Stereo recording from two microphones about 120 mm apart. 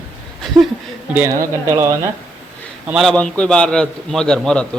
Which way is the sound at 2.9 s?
Centre (ahead or behind).